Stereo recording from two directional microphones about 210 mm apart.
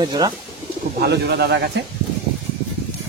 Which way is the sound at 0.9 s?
50° right (ahead or behind).